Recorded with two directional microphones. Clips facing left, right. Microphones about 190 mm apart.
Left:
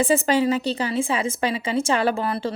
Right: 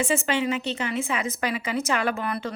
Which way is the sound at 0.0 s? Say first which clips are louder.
Left 5 dB; 35° left (ahead or behind).